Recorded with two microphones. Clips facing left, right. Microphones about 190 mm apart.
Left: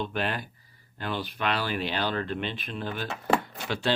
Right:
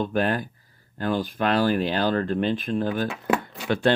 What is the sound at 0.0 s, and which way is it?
Speech, 45° right (ahead or behind).